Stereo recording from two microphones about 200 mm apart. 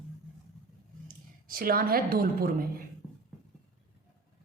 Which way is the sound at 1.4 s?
45° right (ahead or behind).